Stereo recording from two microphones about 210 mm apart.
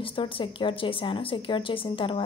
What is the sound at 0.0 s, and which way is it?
Speech, 25° left (ahead or behind).